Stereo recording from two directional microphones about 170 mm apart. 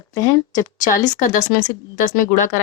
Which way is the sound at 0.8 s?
50° left (ahead or behind).